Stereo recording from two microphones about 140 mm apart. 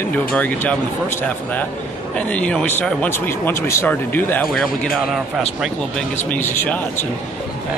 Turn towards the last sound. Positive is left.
turn(degrees=15)  # may be behind; listen again after turning